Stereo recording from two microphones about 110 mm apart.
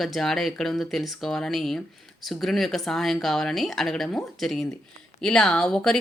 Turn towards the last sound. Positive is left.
turn(degrees=5)  # may be behind; listen again after turning